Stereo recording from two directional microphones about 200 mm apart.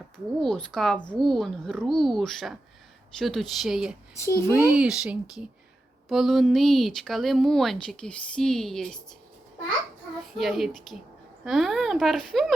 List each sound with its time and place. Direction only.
0.3 s speech: centre (ahead or behind)
10.3 s speech: centre (ahead or behind)